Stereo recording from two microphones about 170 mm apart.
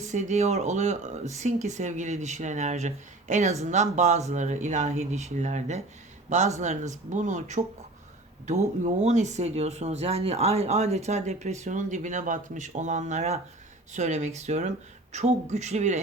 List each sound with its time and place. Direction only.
0.0 s speech: 45° right (ahead or behind)